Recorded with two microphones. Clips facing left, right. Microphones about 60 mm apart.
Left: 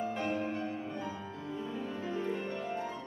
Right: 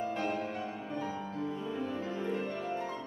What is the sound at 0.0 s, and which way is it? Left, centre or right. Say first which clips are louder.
Music: even; centre.